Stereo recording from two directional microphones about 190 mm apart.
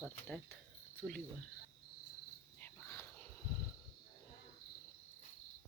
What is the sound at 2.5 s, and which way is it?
Cricket, 10° left (ahead or behind).